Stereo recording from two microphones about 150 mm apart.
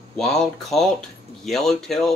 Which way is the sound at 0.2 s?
5° left (ahead or behind).